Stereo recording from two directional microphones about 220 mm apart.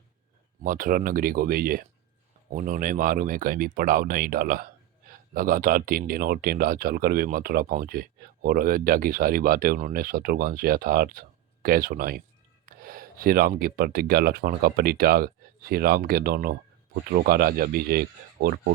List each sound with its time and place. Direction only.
0.6 s speech: 40° right (ahead or behind)